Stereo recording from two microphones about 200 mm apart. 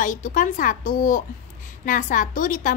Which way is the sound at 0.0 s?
40° left (ahead or behind).